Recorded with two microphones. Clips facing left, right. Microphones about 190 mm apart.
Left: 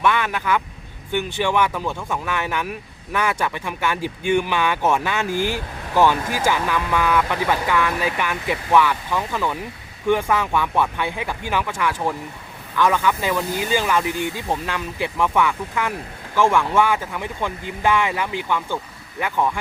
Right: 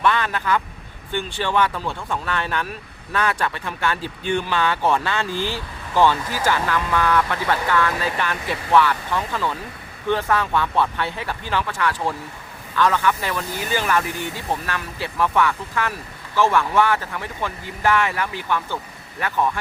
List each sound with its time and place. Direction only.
0.0 s a man's voice: 15° left (ahead or behind)